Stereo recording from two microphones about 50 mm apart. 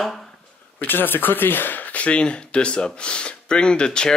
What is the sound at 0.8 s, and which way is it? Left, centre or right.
Speech, left.